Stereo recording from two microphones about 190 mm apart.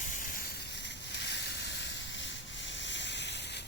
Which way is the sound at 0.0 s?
45° left (ahead or behind).